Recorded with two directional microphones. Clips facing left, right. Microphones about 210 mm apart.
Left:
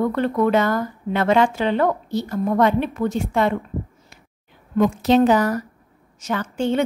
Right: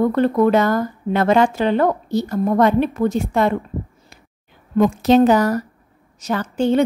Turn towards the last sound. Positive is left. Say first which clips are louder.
# right 4 dB
turn(degrees=-35)  # may be behind; listen again after turning